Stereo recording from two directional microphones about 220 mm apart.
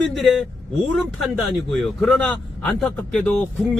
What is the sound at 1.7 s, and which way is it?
Speech, 5° left (ahead or behind).